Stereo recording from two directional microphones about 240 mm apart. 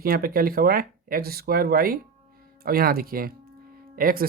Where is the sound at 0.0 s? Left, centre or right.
Right.